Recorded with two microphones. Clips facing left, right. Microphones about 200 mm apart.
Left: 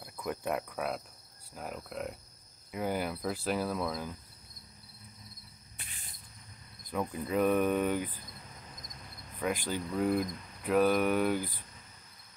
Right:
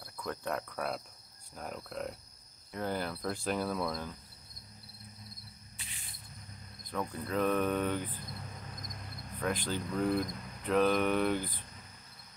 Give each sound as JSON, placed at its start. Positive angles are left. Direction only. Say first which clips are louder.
{"t": 0.0, "sound": "cricket", "louder": "left 3 dB", "side_deg": 15}
{"t": 5.8, "sound": "cricket", "louder": "left 1 dB", "side_deg": 55}
{"t": 6.9, "sound": "cricket", "louder": "left 3 dB", "side_deg": 15}
{"t": 9.4, "sound": "cricket", "louder": "left 1 dB", "side_deg": 10}